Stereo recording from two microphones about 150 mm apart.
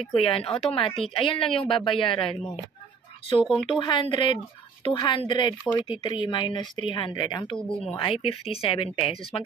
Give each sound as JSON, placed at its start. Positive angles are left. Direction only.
{"t": 0.2, "sound": "speech", "side_deg": 35}